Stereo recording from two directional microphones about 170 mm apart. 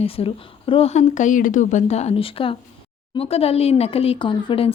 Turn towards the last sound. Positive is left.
turn(degrees=30)  # may be behind; listen again after turning